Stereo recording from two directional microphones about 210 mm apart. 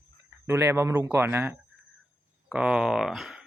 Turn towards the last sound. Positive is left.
turn(degrees=0)  # may be behind; listen again after turning